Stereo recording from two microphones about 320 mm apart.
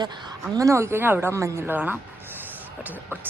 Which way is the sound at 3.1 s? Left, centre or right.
Centre.